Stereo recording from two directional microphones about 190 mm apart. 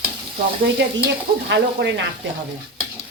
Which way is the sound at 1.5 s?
65° right (ahead or behind).